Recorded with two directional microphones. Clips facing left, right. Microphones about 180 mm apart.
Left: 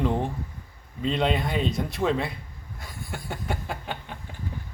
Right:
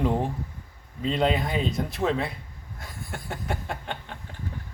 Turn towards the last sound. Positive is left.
turn(degrees=5)  # may be behind; listen again after turning